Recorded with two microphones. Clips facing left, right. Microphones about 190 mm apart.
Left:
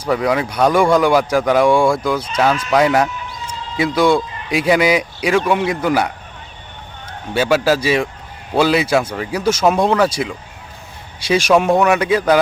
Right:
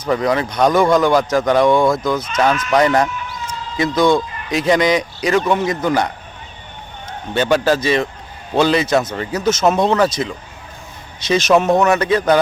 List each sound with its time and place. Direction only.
0.0 s speech: 5° left (ahead or behind)
7.3 s speech: 10° left (ahead or behind)